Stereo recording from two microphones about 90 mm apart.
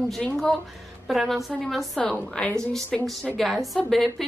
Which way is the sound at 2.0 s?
10° left (ahead or behind).